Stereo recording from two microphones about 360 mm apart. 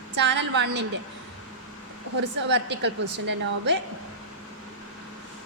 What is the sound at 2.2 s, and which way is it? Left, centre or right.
Speech, right.